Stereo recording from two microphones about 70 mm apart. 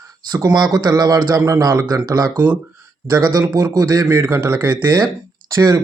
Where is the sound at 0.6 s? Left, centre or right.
Right.